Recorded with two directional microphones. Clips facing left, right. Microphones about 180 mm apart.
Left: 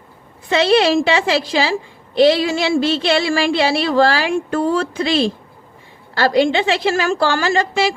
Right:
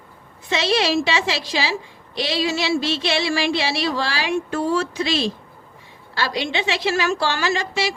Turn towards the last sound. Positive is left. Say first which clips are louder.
# left 5 dB
turn(degrees=50)  # may be behind; listen again after turning